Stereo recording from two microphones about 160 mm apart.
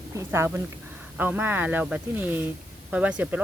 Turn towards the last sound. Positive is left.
turn(degrees=-5)  # may be behind; listen again after turning